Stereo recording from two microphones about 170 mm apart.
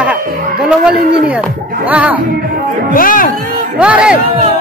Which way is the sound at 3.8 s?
5° right (ahead or behind).